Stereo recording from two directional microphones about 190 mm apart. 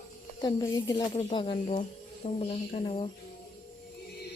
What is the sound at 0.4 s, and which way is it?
Speech, 25° left (ahead or behind).